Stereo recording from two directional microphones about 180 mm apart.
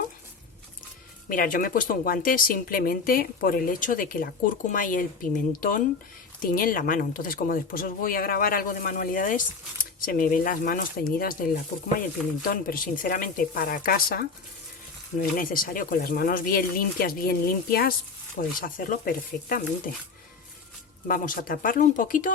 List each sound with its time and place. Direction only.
1.3 s speech: 50° left (ahead or behind)
21.1 s speech: 50° left (ahead or behind)